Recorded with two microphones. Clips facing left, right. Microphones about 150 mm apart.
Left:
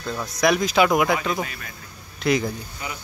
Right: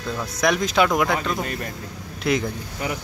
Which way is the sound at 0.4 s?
5° left (ahead or behind).